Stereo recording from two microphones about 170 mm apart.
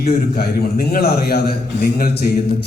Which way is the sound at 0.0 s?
65° left (ahead or behind).